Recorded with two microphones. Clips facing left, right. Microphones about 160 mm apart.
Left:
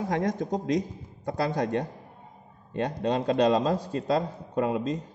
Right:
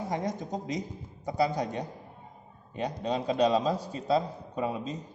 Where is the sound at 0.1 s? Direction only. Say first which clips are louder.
Left 5 dB; 90° left.